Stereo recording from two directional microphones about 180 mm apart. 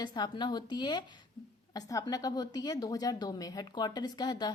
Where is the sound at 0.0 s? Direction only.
25° left (ahead or behind).